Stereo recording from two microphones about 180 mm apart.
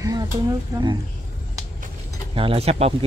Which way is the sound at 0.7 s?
20° right (ahead or behind).